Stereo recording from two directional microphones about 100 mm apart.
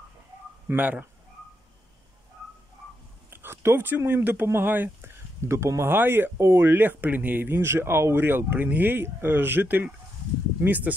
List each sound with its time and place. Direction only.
0.7 s speech: 15° right (ahead or behind)
3.3 s speech: 25° right (ahead or behind)